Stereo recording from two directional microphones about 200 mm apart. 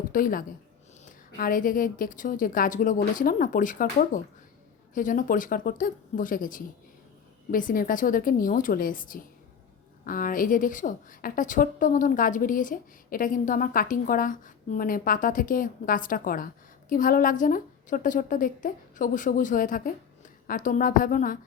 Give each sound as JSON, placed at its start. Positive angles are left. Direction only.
{"t": 0.1, "sound": "a woman's voice", "side_deg": 45}